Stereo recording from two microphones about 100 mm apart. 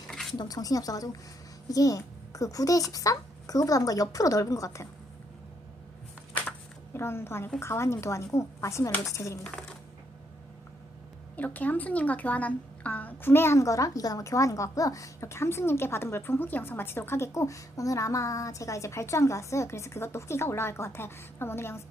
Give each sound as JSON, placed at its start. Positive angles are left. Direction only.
{"t": 0.1, "sound": "a sound", "side_deg": 5}
{"t": 0.3, "sound": "a woman's voice", "side_deg": 40}
{"t": 6.9, "sound": "a woman's voice", "side_deg": 25}
{"t": 9.4, "sound": "coin", "side_deg": 10}
{"t": 11.3, "sound": "a woman's voice", "side_deg": 15}